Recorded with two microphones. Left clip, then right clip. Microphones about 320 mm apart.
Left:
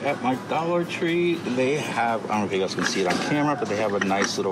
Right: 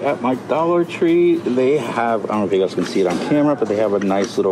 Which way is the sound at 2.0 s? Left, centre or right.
Right.